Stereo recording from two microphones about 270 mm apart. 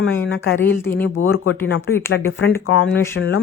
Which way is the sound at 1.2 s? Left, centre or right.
Left.